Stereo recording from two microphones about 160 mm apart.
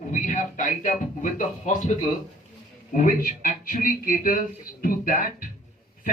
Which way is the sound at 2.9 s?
55° left (ahead or behind).